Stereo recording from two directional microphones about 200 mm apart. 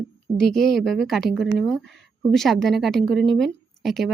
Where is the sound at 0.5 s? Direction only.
Centre (ahead or behind).